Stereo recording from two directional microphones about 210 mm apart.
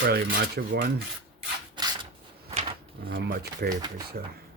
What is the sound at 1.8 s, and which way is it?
Mechanisms, 20° right (ahead or behind).